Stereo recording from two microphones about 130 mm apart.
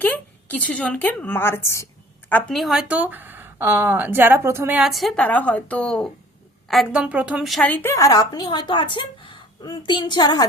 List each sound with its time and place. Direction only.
0.0 s a woman's voice: 15° left (ahead or behind)
2.3 s a woman's voice: centre (ahead or behind); by 4.8 s 15° right (ahead or behind)
4.8 s a woman's voice: centre (ahead or behind)
6.7 s a woman's voice: 5° right (ahead or behind)
7.7 s a woman's voice: 15° left (ahead or behind); by 10.4 s 35° left (ahead or behind)